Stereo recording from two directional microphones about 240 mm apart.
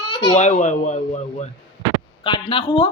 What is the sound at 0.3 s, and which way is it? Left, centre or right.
A man's voice, left.